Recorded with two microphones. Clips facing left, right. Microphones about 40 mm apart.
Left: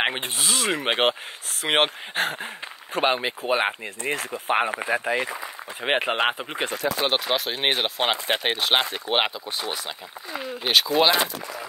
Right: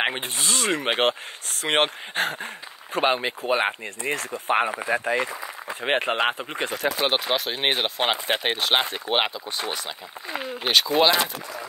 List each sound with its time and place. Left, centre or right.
0.0 s speech: centre
6.9 s speech: centre
10.3 s speech: centre